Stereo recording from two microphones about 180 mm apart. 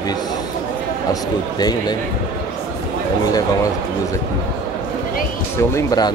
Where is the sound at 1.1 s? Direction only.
20° left (ahead or behind).